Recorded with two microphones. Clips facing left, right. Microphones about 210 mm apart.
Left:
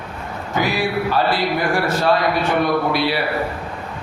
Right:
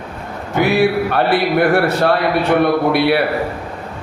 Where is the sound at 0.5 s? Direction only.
60° right (ahead or behind).